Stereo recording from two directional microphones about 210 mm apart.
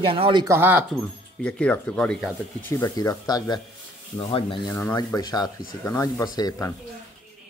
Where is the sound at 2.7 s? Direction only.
15° left (ahead or behind).